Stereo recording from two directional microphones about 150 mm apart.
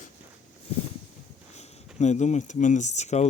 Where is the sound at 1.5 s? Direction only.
50° left (ahead or behind).